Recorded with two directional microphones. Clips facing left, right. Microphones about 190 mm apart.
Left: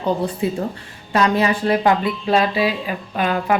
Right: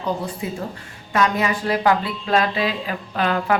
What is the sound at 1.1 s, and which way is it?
A woman's voice, 35° left (ahead or behind).